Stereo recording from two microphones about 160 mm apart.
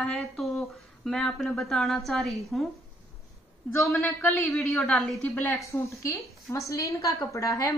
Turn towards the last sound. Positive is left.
turn(degrees=20)  # may be behind; listen again after turning